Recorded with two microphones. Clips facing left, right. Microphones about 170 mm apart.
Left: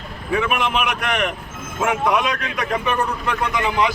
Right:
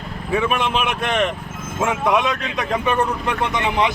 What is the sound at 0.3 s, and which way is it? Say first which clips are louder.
Speech: right 1 dB; 25° right (ahead or behind).